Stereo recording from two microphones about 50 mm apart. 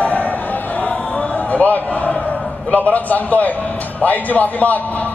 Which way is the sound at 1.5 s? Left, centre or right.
Left.